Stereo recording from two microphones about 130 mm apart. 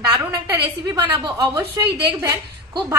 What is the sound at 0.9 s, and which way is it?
A woman's voice, 35° right (ahead or behind).